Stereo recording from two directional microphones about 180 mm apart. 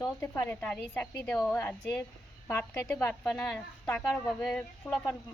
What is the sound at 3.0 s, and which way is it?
Speech, 10° left (ahead or behind).